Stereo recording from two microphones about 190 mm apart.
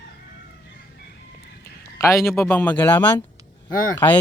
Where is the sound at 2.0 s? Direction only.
15° left (ahead or behind).